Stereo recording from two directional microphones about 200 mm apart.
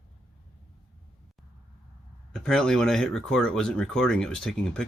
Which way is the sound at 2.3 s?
Centre (ahead or behind).